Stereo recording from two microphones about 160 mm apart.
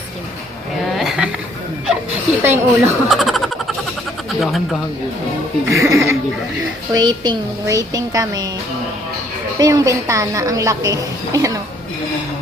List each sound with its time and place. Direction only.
0.9 s a sound: 5° right (ahead or behind)
2.4 s a woman's voice: 15° right (ahead or behind)
3.1 s a sound: centre (ahead or behind)
4.3 s speech: centre (ahead or behind)
5.6 s a woman's voice: 20° right (ahead or behind)
9.6 s a woman's voice: 25° right (ahead or behind)